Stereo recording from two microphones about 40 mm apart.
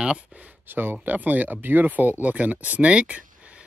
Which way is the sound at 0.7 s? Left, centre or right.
Right.